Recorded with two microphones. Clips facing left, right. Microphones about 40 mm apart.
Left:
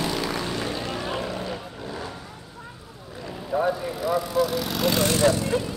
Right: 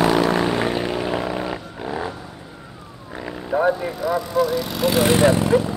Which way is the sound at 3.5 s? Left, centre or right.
Centre.